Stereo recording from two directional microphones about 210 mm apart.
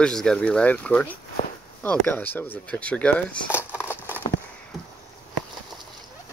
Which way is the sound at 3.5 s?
10° left (ahead or behind).